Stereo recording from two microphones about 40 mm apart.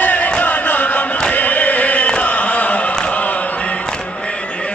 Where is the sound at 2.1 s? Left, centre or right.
Left.